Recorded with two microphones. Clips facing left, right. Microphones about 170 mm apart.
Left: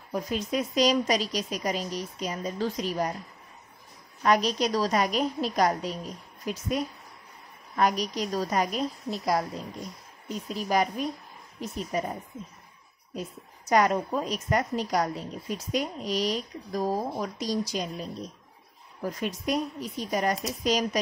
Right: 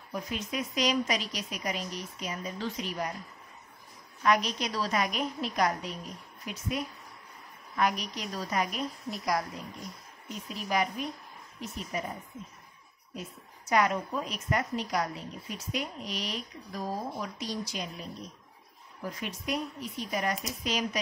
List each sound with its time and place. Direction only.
0.1 s a woman's voice: 35° left (ahead or behind)
4.2 s a woman's voice: 35° left (ahead or behind)
13.7 s a woman's voice: 40° left (ahead or behind)
19.0 s a woman's voice: 40° left (ahead or behind)